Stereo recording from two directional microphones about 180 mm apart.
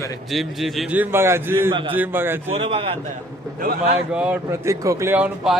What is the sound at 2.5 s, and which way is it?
Speech, 30° right (ahead or behind).